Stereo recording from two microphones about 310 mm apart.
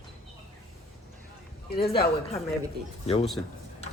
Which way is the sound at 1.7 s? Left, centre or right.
Left.